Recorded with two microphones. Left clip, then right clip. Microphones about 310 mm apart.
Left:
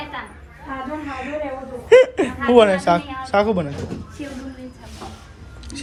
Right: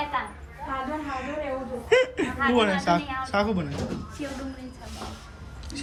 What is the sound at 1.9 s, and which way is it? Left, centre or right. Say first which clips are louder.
A man's voice: left 10 dB; centre.